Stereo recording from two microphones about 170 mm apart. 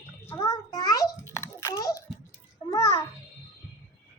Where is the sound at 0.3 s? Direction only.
20° left (ahead or behind).